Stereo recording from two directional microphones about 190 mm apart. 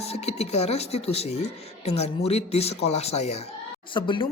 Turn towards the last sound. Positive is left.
turn(degrees=25)  # may be behind; listen again after turning